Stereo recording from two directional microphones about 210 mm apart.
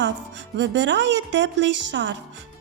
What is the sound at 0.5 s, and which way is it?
A woman's voice, 60° right (ahead or behind).